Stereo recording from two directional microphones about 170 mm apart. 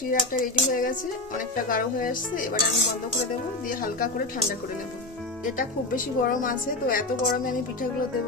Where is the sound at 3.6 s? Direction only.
55° left (ahead or behind).